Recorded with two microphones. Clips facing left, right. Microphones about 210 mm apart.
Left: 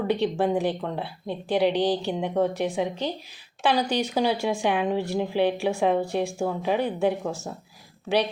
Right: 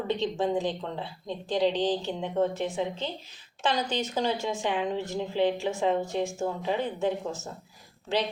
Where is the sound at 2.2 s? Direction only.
65° left (ahead or behind).